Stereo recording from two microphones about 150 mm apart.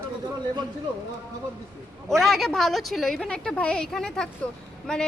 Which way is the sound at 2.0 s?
Centre (ahead or behind).